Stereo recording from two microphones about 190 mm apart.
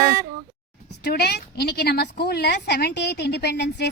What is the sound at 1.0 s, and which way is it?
A woman's voice, 60° left (ahead or behind).